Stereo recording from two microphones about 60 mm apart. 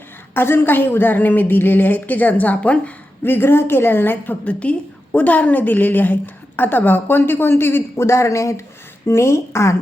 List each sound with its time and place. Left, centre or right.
0.3 s a woman's voice: left
3.2 s a woman's voice: left
8.0 s speech: left
9.0 s speech: left